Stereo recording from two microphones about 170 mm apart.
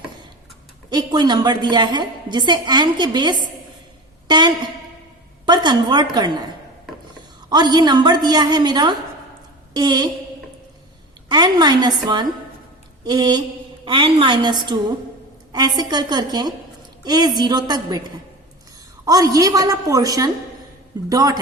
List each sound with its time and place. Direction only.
0.9 s a woman's voice: 25° right (ahead or behind)
7.5 s a woman's voice: 25° right (ahead or behind)
11.3 s a woman's voice: 25° right (ahead or behind)
19.0 s a woman's voice: 20° right (ahead or behind)